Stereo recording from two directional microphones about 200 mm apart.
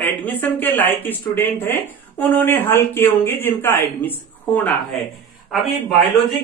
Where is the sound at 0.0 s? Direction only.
10° left (ahead or behind).